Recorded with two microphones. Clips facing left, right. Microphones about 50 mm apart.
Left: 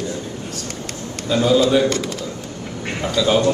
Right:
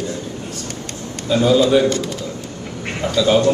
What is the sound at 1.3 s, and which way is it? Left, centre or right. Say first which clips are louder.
Speech: right 2 dB; centre.